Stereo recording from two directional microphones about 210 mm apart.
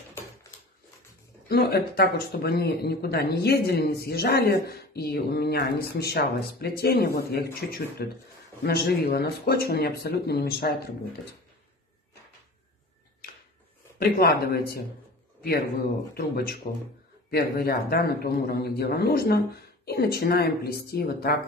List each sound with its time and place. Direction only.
1.5 s speech: 50° left (ahead or behind)
13.9 s speech: 45° left (ahead or behind)
16.2 s speech: 45° left (ahead or behind)